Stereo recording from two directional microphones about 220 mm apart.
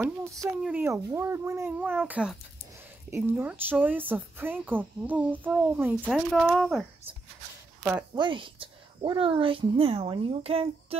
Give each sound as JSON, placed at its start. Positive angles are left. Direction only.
{"t": 0.0, "sound": "speech", "side_deg": -10}
{"t": 7.8, "sound": "a woman's voice", "side_deg": -15}